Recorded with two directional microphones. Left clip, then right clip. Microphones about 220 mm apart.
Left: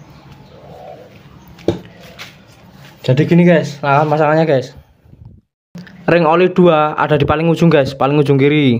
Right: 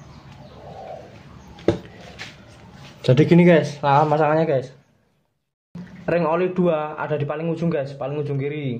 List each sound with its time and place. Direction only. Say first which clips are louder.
3.0 s speech: left 2 dB; centre (ahead or behind)
3.8 s speech: left 5 dB; 10° left (ahead or behind); by 4.7 s 25° left (ahead or behind)
6.0 s speech: left 9 dB; 30° left (ahead or behind); by 8.7 s 45° left (ahead or behind)